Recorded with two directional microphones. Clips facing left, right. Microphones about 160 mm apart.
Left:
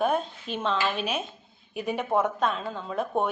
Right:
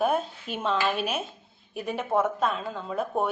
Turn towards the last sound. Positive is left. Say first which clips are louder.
# even
turn(degrees=-5)  # may be behind; listen again after turning